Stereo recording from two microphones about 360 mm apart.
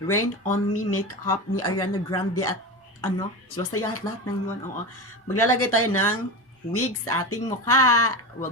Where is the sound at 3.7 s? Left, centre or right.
Left.